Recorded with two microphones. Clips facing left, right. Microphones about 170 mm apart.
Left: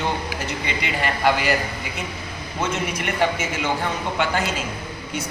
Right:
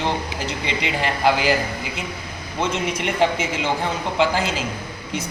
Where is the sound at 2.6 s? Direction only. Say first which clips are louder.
Right 2 dB; 25° right (ahead or behind).